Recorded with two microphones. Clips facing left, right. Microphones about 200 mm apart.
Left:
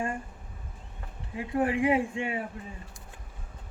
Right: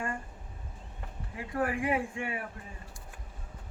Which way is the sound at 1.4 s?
25° left (ahead or behind).